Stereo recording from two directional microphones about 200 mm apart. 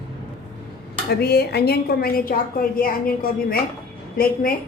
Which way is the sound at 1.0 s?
50° left (ahead or behind).